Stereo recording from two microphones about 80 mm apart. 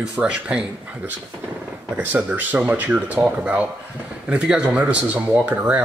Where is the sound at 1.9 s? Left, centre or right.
Centre.